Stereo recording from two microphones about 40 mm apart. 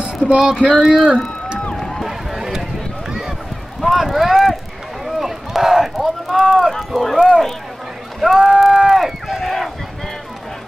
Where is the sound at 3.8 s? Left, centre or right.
Centre.